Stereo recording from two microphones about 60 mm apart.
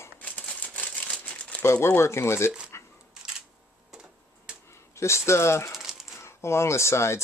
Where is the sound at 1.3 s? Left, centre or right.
Centre.